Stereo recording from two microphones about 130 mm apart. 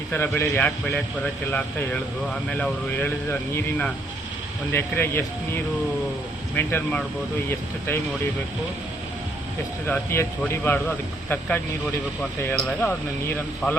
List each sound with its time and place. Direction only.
0.1 s speech: 15° left (ahead or behind)
9.8 s speech: 15° left (ahead or behind)